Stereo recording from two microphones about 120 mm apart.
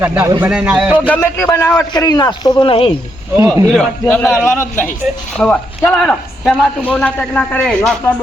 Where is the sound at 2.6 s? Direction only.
50° left (ahead or behind).